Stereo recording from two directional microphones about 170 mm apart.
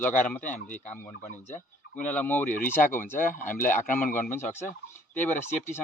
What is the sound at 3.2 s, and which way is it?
Speech, 50° left (ahead or behind).